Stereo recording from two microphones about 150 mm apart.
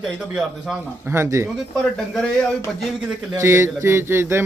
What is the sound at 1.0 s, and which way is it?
Speech, 15° right (ahead or behind).